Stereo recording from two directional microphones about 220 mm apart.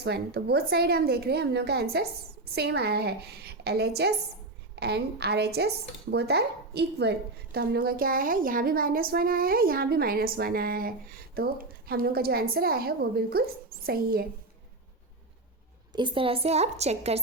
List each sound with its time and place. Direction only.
0.0 s speech: 50° right (ahead or behind)
15.9 s a woman's voice: 20° right (ahead or behind)